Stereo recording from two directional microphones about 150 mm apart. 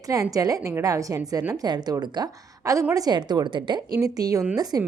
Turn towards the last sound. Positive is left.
turn(degrees=-25)  # may be behind; listen again after turning